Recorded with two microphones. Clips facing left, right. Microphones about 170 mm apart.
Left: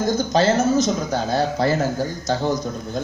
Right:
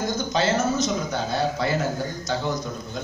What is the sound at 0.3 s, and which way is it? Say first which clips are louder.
Speech: left 5 dB; 40° left (ahead or behind).